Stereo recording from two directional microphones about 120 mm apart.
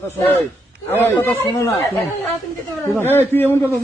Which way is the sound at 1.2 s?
20° left (ahead or behind).